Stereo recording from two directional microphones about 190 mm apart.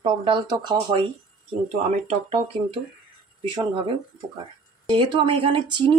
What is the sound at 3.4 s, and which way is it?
Speech, 25° right (ahead or behind).